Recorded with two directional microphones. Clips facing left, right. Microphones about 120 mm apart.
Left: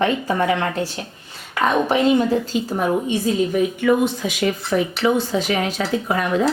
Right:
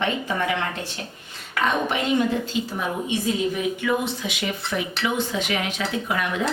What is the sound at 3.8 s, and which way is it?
A woman's voice, 45° left (ahead or behind).